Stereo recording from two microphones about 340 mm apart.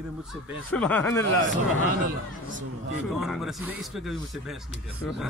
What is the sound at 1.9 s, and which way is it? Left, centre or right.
Speech, right.